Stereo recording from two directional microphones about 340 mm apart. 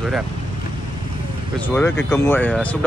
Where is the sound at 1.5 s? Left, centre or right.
Centre.